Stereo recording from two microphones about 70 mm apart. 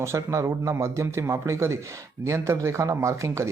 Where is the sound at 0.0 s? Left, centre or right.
Right.